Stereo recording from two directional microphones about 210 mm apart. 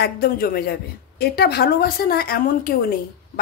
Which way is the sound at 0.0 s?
45° left (ahead or behind).